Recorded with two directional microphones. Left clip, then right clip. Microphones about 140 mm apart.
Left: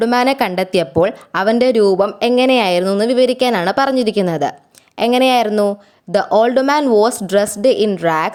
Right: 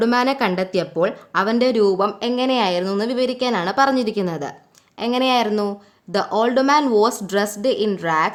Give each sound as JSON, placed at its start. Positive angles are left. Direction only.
{"t": 0.0, "sound": "a woman's voice", "side_deg": 40}